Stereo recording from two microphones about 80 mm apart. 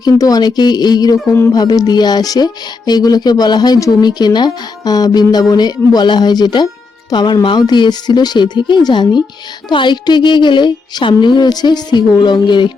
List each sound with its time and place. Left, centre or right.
0.0 s speech: left